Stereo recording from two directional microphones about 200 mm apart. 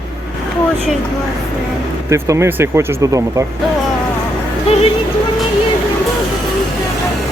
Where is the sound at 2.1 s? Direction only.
15° right (ahead or behind).